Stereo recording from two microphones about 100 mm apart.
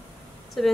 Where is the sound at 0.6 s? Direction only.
Centre (ahead or behind).